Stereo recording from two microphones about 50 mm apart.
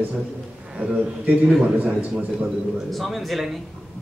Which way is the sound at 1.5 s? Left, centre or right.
Centre.